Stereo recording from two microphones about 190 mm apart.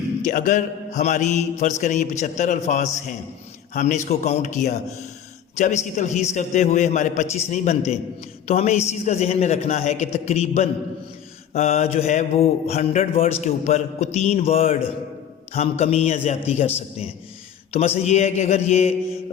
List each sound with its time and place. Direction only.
0.2 s mantra: 45° left (ahead or behind)